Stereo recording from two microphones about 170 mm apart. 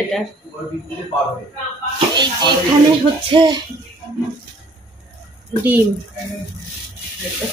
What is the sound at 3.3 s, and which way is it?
Speech, 25° right (ahead or behind).